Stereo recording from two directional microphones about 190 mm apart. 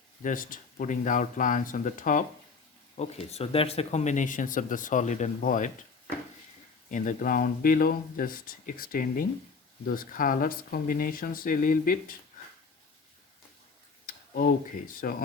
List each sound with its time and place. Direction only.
0.2 s speech: 45° left (ahead or behind)
3.0 s speech: 35° left (ahead or behind)
6.9 s speech: 40° left (ahead or behind)
14.1 s tick-tock: 50° left (ahead or behind)
15.0 s speech: 45° left (ahead or behind)